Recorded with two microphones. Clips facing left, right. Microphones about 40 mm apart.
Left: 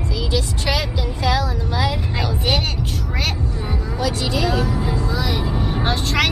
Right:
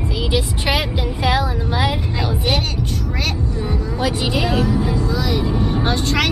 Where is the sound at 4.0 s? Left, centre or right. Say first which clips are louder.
Right 1 dB; right.